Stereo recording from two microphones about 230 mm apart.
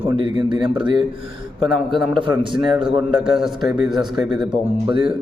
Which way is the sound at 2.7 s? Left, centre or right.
Centre.